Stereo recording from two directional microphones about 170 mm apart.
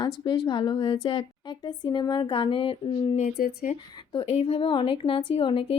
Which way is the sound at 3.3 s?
65° left (ahead or behind).